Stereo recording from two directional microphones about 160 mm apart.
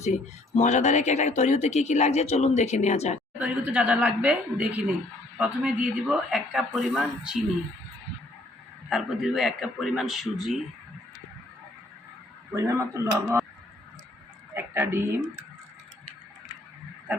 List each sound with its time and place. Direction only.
0.0 s speech: 45° left (ahead or behind)
3.3 s speech: 10° right (ahead or behind)
8.9 s speech: centre (ahead or behind)
12.5 s speech: 20° right (ahead or behind)
14.5 s speech: 15° right (ahead or behind)